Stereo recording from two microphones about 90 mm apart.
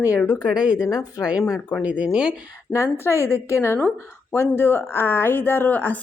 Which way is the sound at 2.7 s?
35° left (ahead or behind).